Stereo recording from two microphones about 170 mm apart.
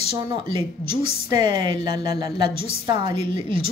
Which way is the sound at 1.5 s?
25° right (ahead or behind).